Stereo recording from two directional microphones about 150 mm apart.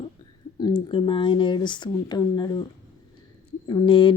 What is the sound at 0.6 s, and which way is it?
Speech, 35° left (ahead or behind).